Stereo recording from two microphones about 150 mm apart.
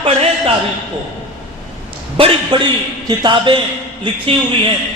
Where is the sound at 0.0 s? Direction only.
40° right (ahead or behind).